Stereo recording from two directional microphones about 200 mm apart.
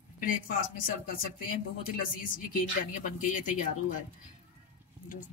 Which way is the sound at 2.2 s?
45° left (ahead or behind).